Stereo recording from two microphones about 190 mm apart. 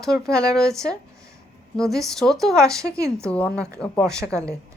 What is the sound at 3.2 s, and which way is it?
Speech, 5° left (ahead or behind).